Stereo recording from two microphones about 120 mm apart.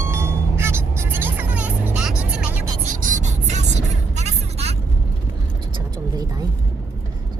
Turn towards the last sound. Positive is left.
turn(degrees=-35)  # may be behind; listen again after turning